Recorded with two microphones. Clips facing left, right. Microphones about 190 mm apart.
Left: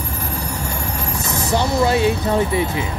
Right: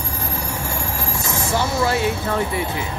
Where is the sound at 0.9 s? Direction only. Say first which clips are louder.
Left 1 dB; 20° left (ahead or behind).